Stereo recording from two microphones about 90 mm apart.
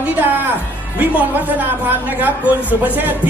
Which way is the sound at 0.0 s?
20° right (ahead or behind).